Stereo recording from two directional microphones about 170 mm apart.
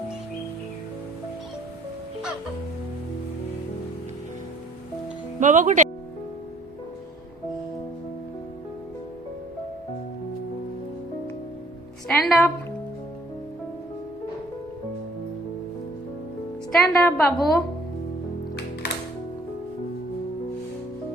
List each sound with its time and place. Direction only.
5.4 s speech: 45° right (ahead or behind)
12.0 s music: centre (ahead or behind)
16.7 s a sound: centre (ahead or behind)